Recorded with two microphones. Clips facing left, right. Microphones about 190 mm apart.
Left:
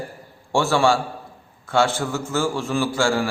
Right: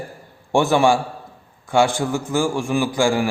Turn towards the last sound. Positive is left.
turn(degrees=-15)  # may be behind; listen again after turning